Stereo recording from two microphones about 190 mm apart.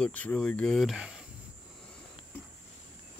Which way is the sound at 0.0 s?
5° left (ahead or behind).